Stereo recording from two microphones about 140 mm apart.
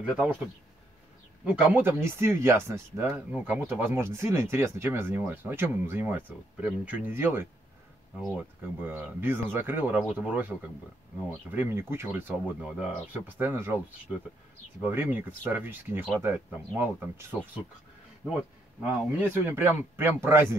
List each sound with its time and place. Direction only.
0.0 s speech: 5° right (ahead or behind)
1.4 s speech: 10° right (ahead or behind)
14.8 s speech: 15° right (ahead or behind)
18.8 s speech: 15° right (ahead or behind)